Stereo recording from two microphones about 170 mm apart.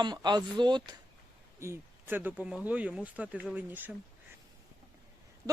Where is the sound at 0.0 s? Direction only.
25° right (ahead or behind).